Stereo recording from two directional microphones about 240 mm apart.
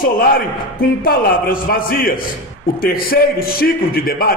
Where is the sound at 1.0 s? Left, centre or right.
Left.